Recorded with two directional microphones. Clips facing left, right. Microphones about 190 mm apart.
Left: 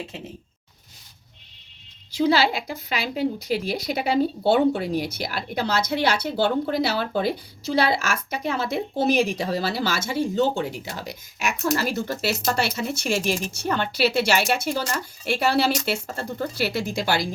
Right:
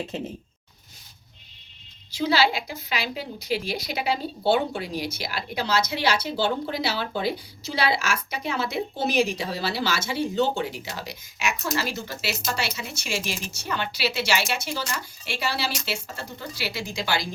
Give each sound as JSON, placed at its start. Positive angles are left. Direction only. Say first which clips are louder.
{"t": 3.2, "sound": "speech", "louder": "left 5 dB", "side_deg": 50}